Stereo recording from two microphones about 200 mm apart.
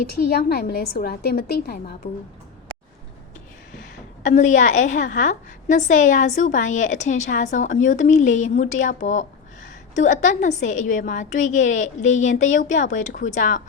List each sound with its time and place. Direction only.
0.1 s a woman's voice: 50° left (ahead or behind)
4.2 s a woman's voice: 40° left (ahead or behind)